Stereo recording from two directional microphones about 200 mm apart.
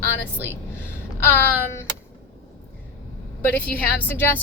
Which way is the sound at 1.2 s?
10° left (ahead or behind).